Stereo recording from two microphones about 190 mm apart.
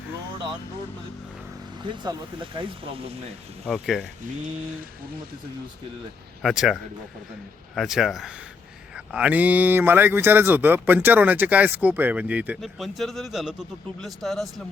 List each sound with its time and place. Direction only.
1.9 s speech: 25° right (ahead or behind)
3.7 s speech: centre (ahead or behind)
6.4 s speech: centre (ahead or behind)
7.8 s a man's voice: centre (ahead or behind)